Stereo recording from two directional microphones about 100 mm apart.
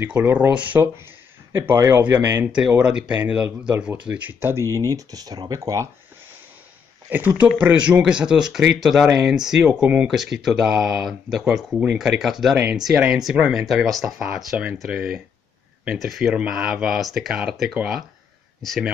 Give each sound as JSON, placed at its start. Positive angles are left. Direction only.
{"t": 0.0, "sound": "speech", "side_deg": -20}
{"t": 1.5, "sound": "speech", "side_deg": -25}
{"t": 4.4, "sound": "speech", "side_deg": -25}
{"t": 7.1, "sound": "speech", "side_deg": -20}